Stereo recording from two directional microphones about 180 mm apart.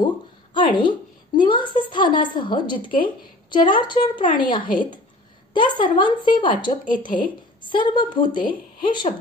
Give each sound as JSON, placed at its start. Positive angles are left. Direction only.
{"t": 0.6, "sound": "a woman's voice", "side_deg": 25}